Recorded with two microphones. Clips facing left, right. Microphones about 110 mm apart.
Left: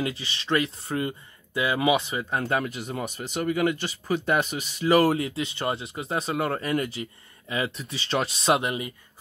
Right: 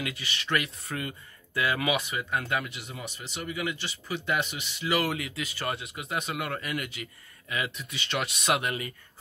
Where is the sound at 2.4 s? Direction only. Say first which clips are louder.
Left 5 dB; 40° left (ahead or behind); by 8.9 s 20° left (ahead or behind).